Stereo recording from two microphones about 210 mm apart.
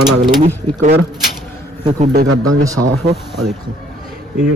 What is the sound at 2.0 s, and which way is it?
Speech, 40° right (ahead or behind).